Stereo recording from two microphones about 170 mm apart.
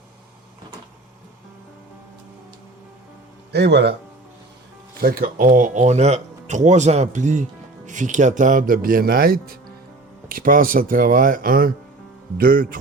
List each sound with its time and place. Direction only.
3.5 s a man's voice: 80° right
4.9 s speech: 60° right (ahead or behind)